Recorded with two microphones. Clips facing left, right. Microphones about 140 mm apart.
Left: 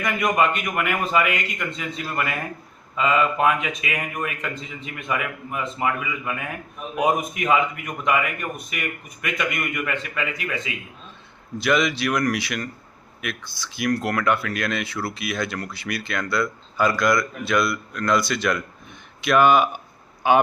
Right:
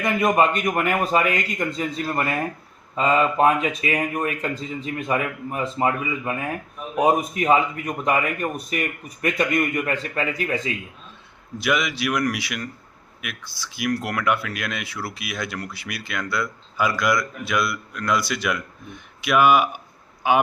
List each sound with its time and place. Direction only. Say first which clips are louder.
0.0 s speech: right 2 dB; 30° right (ahead or behind)
11.5 s speech: left 2 dB; 10° right (ahead or behind)